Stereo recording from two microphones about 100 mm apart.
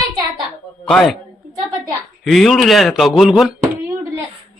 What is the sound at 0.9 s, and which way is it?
Speech, 5° left (ahead or behind).